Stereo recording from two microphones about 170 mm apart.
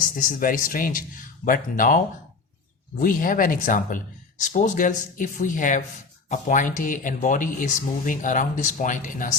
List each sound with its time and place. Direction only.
0.0 s speech: 50° left (ahead or behind)
3.0 s speech: 55° left (ahead or behind)